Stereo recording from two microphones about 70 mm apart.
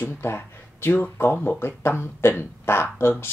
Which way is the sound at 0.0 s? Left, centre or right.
Left.